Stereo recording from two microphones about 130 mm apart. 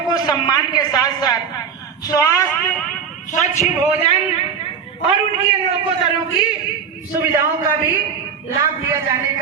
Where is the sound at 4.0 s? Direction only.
50° left (ahead or behind).